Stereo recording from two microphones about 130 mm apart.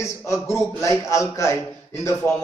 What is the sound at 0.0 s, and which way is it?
A man's voice, 20° left (ahead or behind).